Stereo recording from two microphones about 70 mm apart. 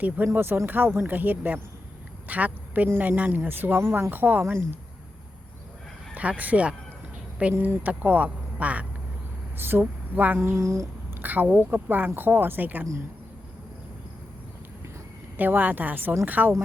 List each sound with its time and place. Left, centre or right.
0.3 s speech: right
6.1 s speech: right
9.6 s speech: right
10.4 s speech: right
11.1 s speech: right
15.4 s speech: right